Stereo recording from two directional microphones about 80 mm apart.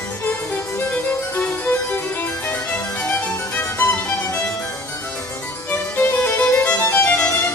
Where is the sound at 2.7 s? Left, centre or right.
Left.